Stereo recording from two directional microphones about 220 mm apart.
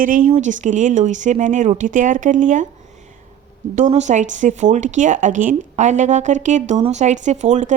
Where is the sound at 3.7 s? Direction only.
35° right (ahead or behind).